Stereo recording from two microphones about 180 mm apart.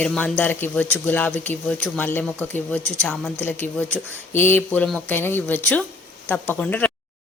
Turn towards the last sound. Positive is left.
turn(degrees=10)  # may be behind; listen again after turning